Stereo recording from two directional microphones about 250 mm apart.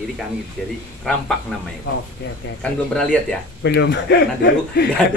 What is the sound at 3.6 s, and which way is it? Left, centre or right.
Speech, left.